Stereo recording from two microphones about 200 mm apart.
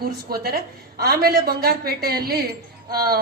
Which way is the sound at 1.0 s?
50° right (ahead or behind).